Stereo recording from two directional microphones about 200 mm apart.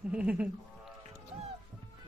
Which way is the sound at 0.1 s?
5° right (ahead or behind).